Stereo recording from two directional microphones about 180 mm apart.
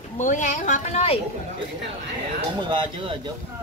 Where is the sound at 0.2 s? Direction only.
45° left (ahead or behind).